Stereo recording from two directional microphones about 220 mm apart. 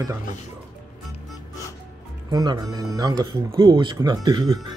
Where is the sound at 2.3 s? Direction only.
15° right (ahead or behind).